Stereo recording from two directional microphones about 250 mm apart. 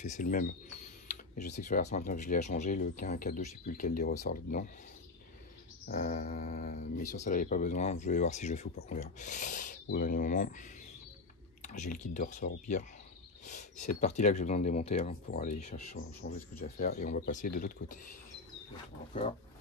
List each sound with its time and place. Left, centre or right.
0.0 s mantra: left
1.0 s speech: left
5.9 s mantra: left
7.2 s speech: left
11.7 s speech: left
13.5 s speech: left